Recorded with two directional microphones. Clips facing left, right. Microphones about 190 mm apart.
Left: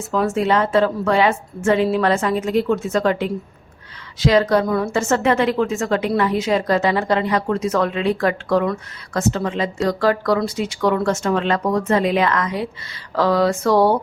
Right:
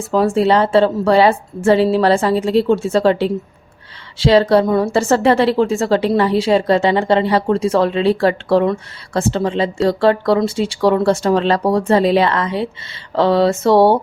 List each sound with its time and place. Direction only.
0.1 s a woman's voice: 30° right (ahead or behind)